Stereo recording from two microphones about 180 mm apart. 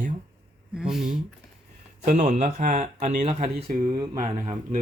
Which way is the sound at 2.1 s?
40° right (ahead or behind).